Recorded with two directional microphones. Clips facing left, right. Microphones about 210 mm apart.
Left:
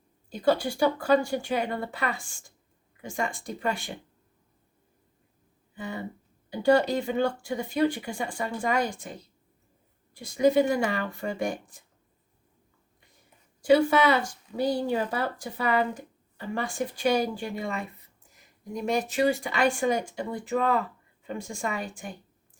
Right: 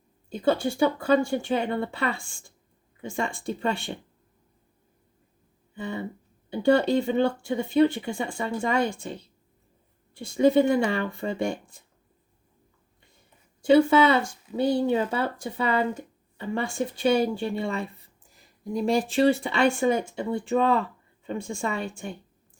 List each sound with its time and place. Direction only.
0.3 s speech: 25° right (ahead or behind)
6.5 s speech: 25° right (ahead or behind)
10.2 s speech: 25° right (ahead or behind)
13.6 s speech: 25° right (ahead or behind)